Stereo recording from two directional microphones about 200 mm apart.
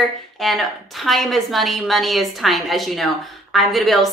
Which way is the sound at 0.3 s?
Centre (ahead or behind).